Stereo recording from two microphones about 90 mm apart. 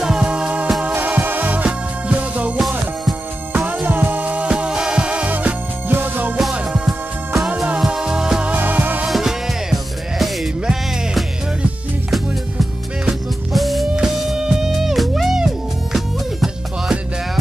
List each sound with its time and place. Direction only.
0.0 s music: 10° right (ahead or behind)
3.8 s music: 25° right (ahead or behind)
6.9 s music: centre (ahead or behind)
8.5 s music: 20° right (ahead or behind)
9.0 s music: 5° right (ahead or behind)
13.0 s music: centre (ahead or behind)